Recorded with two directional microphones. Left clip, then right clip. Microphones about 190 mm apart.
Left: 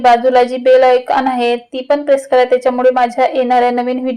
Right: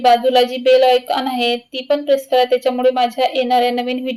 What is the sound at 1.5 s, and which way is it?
Speech, 40° left (ahead or behind).